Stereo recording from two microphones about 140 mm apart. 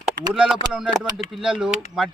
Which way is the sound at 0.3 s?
5° right (ahead or behind).